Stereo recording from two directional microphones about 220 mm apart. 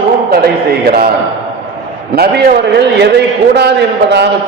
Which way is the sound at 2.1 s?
45° right (ahead or behind).